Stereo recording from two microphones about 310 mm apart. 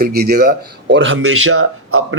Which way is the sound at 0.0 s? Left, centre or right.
Right.